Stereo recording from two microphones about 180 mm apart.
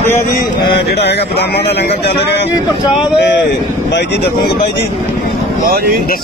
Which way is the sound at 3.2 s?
70° left (ahead or behind).